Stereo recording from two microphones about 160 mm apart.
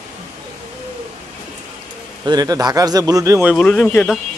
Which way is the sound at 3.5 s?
5° left (ahead or behind).